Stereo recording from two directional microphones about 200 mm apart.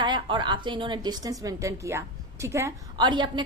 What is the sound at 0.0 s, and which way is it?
A woman's voice, 25° right (ahead or behind).